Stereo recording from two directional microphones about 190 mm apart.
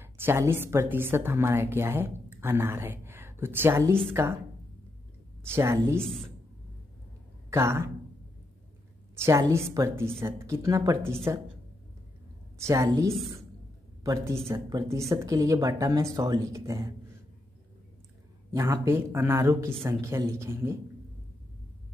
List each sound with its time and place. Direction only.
0.0 s speech: 10° right (ahead or behind)
5.5 s speech: 15° right (ahead or behind)
6.0 s speech: centre (ahead or behind)
7.4 s speech: 15° right (ahead or behind)
9.1 s speech: 15° right (ahead or behind)
12.5 s speech: 15° right (ahead or behind)
18.5 s speech: 15° right (ahead or behind)